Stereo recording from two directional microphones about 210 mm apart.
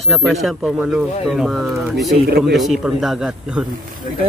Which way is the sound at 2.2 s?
45° right (ahead or behind).